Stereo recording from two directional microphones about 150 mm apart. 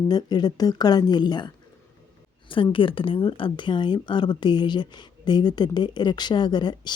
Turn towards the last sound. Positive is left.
turn(degrees=30)  # may be behind; listen again after turning